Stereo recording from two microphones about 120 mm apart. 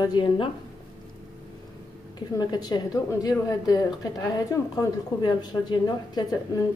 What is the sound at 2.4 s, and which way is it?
A woman's voice, 35° left (ahead or behind).